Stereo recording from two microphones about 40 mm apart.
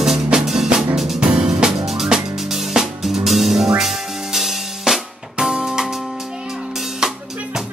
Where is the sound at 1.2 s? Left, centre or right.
Centre.